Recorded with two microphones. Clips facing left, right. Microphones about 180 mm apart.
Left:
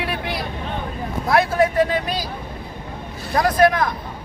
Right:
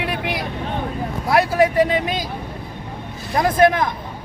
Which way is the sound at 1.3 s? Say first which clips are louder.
Right 1 dB; 15° right (ahead or behind).